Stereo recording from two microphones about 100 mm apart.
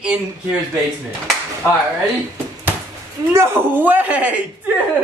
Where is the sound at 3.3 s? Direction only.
25° right (ahead or behind).